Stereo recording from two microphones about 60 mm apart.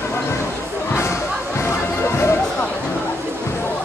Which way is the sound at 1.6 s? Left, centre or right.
Left.